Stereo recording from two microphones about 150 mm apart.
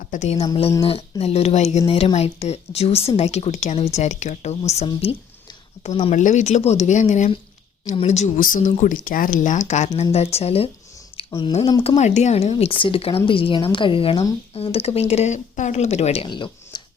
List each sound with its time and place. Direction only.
0.1 s speech: 50° left (ahead or behind)
0.8 s speech: 40° left (ahead or behind)
6.1 s speech: 55° left (ahead or behind)
8.4 s speech: 65° left (ahead or behind); by 10.7 s 40° left (ahead or behind)
11.2 s a sound: 35° left (ahead or behind)
11.8 s speech: 45° left (ahead or behind)
16.2 s speech: 30° left (ahead or behind)